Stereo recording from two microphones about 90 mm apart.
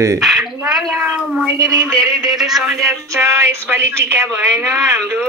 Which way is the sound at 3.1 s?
30° right (ahead or behind).